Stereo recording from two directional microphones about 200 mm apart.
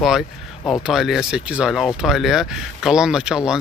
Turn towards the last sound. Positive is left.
turn(degrees=-5)  # may be behind; listen again after turning